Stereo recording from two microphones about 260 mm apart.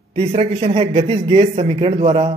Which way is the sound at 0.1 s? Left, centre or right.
Right.